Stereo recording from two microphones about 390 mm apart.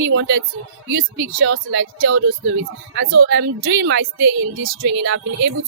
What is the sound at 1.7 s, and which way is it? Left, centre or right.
Music, right.